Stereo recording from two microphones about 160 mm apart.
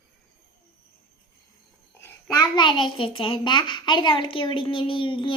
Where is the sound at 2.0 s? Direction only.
25° left (ahead or behind).